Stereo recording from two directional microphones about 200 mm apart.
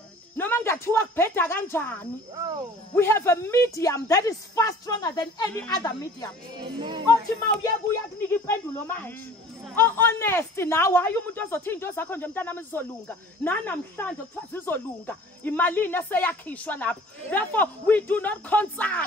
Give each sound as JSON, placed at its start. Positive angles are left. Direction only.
{"t": 0.4, "sound": "a woman's voice", "side_deg": 10}
{"t": 2.3, "sound": "speech", "side_deg": -20}
{"t": 2.9, "sound": "speech", "side_deg": 10}
{"t": 6.8, "sound": "speech", "side_deg": -20}
{"t": 8.5, "sound": "speech", "side_deg": 10}